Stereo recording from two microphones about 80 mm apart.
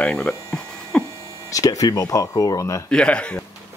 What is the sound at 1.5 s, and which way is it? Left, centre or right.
Speech, left.